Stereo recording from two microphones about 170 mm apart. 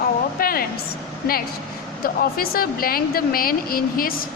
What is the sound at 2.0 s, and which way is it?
Speech, 60° left (ahead or behind).